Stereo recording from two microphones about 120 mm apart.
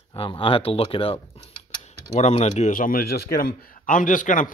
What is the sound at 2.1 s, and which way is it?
A man's voice, 70° left (ahead or behind).